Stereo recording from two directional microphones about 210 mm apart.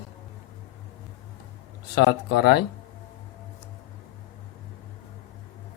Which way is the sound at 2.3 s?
50° left (ahead or behind).